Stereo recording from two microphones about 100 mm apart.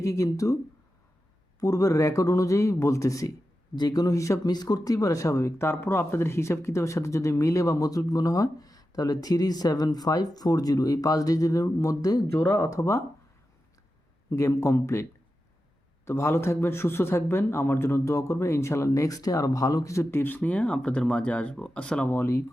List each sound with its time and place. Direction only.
0.0 s speech: 30° left (ahead or behind)
1.5 s speech: 35° left (ahead or behind)
12.4 s a man's voice: 20° left (ahead or behind)
12.7 s speech: 30° left (ahead or behind)
14.3 s a man's voice: 35° left (ahead or behind)
16.0 s a man's voice: 25° left (ahead or behind); by 22.1 s 10° left (ahead or behind)
22.1 s a man's voice: 25° left (ahead or behind)